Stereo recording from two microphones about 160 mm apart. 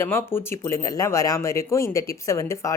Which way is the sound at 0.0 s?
15° left (ahead or behind).